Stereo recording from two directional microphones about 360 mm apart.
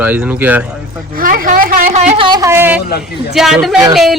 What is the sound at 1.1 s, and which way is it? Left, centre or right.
A woman's voice, right.